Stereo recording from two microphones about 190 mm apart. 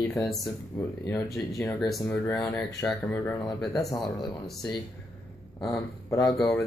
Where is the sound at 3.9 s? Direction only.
25° left (ahead or behind).